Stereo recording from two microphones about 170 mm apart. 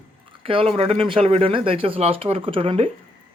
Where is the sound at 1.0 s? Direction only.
30° right (ahead or behind).